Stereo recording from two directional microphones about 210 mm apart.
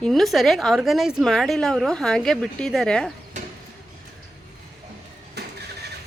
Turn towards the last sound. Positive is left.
turn(degrees=-50)  # may be behind; listen again after turning